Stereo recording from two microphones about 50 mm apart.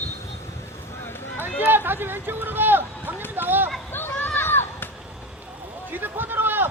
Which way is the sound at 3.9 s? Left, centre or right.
Left.